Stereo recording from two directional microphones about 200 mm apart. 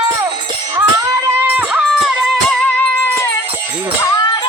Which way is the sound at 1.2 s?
10° right (ahead or behind).